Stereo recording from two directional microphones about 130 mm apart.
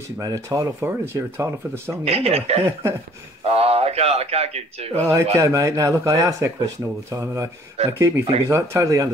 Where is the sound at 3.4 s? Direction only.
50° right (ahead or behind).